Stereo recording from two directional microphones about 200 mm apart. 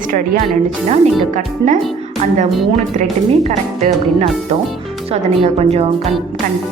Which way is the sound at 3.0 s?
35° right (ahead or behind).